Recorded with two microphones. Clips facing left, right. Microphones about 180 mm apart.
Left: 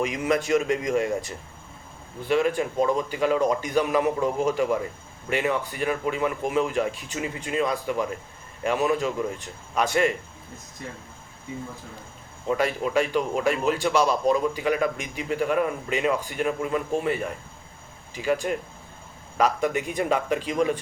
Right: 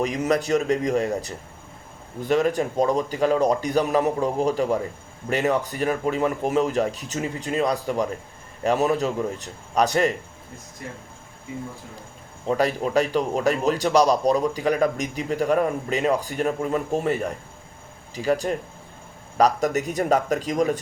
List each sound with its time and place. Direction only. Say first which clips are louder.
0.0 s a man's voice: right 2 dB; 35° right (ahead or behind)
12.5 s a man's voice: right 2 dB; 40° right (ahead or behind)